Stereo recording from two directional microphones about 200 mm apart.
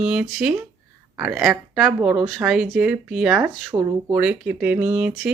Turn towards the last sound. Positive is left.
turn(degrees=-5)  # may be behind; listen again after turning